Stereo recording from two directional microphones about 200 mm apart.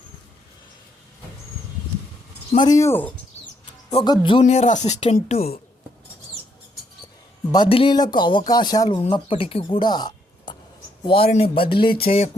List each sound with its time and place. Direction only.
2.5 s speech: 20° left (ahead or behind)
7.5 s speech: 25° left (ahead or behind)